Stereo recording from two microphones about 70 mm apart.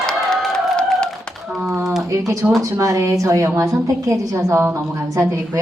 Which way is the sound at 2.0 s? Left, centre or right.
Right.